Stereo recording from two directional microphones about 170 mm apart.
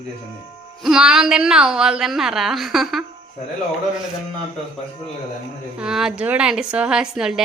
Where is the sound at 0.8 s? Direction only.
5° right (ahead or behind).